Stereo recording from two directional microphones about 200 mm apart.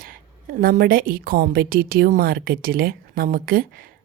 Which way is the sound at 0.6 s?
45° right (ahead or behind).